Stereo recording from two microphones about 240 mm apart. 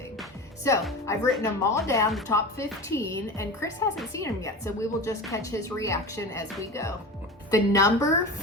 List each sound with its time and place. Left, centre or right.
0.7 s speech: centre